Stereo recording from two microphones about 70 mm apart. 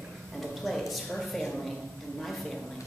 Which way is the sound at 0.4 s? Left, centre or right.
Centre.